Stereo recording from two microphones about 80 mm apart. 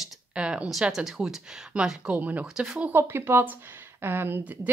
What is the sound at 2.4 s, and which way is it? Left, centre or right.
Speech, centre.